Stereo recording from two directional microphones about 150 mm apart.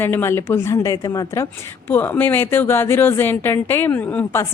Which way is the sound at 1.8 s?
15° left (ahead or behind).